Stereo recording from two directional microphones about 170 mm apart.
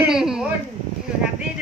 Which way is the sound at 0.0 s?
5° right (ahead or behind).